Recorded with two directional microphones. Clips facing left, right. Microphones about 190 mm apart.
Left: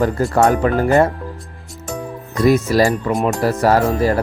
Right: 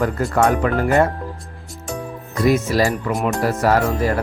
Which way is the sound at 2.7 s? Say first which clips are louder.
Left 3 dB; 40° left (ahead or behind).